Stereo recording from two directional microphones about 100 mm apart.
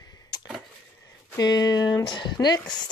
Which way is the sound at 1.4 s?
40° left (ahead or behind).